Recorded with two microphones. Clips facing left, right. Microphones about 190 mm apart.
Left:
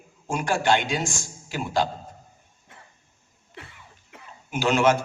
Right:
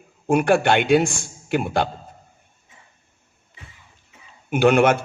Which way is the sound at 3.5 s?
65° left (ahead or behind).